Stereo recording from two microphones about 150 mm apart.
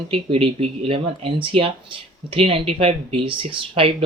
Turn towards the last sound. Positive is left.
turn(degrees=-40)  # may be behind; listen again after turning